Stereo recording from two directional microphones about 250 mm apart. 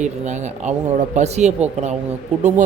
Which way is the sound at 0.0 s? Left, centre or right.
Right.